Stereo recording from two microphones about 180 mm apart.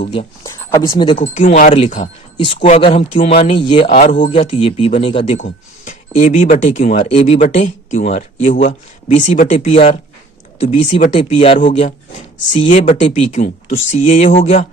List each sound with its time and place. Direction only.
0.1 s speech: 30° left (ahead or behind)
0.6 s speech: 20° left (ahead or behind)
1.2 s speech: 45° left (ahead or behind)
2.4 s speech: 30° left (ahead or behind)
3.9 s speech: 50° left (ahead or behind)
4.3 s speech: 30° left (ahead or behind)
5.4 s speech: 45° left (ahead or behind)